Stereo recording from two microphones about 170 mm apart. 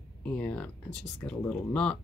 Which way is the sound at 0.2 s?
10° left (ahead or behind).